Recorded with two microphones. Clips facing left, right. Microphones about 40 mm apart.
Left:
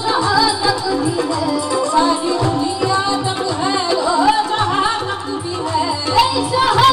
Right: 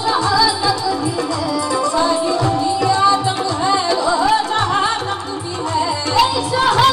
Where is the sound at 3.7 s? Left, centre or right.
Centre.